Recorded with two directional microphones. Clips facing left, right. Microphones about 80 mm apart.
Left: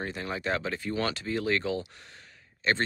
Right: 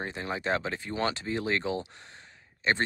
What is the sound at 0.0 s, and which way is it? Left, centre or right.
Speech, right.